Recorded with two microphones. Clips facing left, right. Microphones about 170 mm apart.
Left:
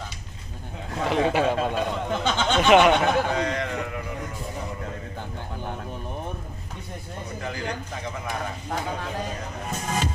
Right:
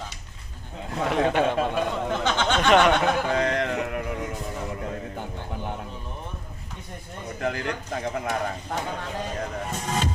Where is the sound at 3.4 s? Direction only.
55° right (ahead or behind).